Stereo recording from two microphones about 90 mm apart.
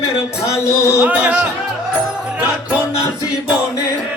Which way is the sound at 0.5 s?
30° left (ahead or behind).